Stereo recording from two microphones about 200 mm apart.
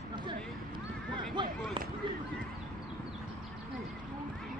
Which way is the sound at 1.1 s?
25° right (ahead or behind).